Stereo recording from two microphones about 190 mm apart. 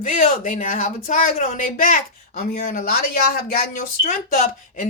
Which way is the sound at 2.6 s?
50° left (ahead or behind).